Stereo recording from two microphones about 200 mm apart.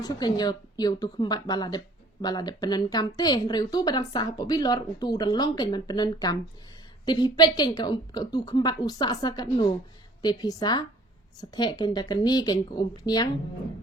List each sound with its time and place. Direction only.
0.0 s speech: 20° left (ahead or behind)